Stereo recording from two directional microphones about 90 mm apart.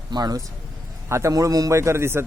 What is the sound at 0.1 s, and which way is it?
A man's voice, 45° right (ahead or behind).